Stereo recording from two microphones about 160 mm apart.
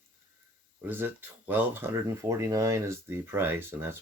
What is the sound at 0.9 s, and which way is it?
Speech, 10° right (ahead or behind).